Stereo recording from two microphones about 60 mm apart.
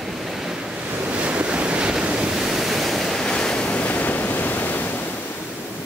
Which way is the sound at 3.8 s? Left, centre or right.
Left.